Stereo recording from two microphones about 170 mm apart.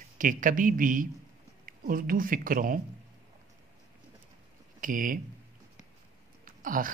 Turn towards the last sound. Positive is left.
turn(degrees=-55)  # may be behind; listen again after turning